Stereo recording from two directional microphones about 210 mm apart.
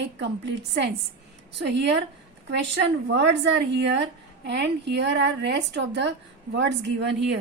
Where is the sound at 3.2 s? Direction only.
55° right (ahead or behind).